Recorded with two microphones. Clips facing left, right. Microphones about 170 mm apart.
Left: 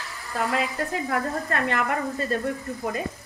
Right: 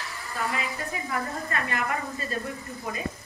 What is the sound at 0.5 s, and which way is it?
A woman's voice, 70° left (ahead or behind).